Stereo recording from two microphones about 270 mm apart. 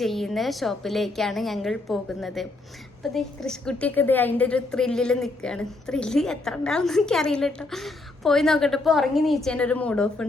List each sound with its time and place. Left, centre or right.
0.0 s a woman's voice: centre